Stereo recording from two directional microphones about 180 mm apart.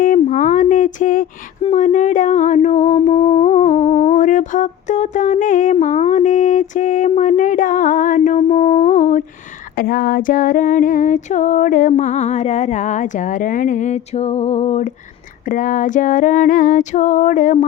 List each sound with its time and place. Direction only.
0.0 s a sound: 45° left (ahead or behind)
5.7 s music: 40° left (ahead or behind)
9.7 s female singing: 50° left (ahead or behind)